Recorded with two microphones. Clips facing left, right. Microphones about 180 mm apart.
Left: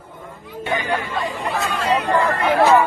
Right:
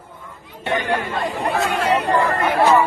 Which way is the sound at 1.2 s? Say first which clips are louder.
Right 3 dB; 60° right (ahead or behind).